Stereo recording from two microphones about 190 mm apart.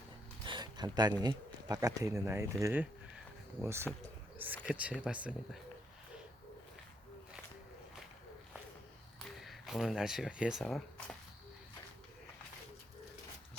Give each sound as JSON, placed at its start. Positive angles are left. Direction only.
{"t": 0.4, "sound": "speech", "side_deg": -25}
{"t": 9.4, "sound": "speech", "side_deg": 0}